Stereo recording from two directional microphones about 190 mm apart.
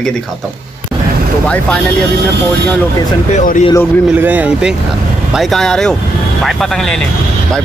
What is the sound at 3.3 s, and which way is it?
Speech, 40° left (ahead or behind).